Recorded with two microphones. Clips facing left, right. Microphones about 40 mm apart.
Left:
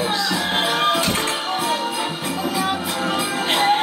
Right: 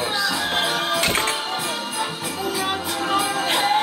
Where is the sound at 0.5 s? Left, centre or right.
Left.